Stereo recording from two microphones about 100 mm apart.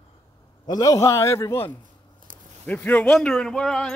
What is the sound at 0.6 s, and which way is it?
A man's voice, 40° left (ahead or behind).